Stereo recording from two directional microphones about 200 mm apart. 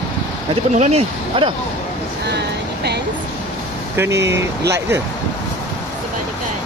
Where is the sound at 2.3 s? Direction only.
55° right (ahead or behind).